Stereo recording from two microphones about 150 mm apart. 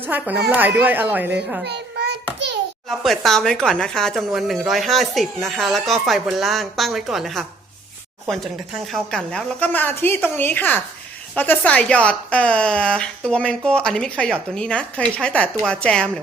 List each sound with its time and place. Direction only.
0.1 s a child's voice: 10° right (ahead or behind)
1.6 s a sound: 90° right
2.9 s a woman's voice: centre (ahead or behind)